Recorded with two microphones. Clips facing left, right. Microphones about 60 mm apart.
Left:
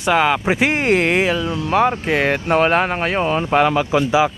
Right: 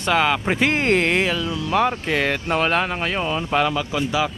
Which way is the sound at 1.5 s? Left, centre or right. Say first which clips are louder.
Left 3 dB; left.